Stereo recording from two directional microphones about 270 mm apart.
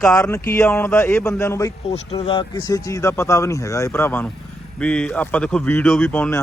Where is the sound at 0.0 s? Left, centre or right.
Centre.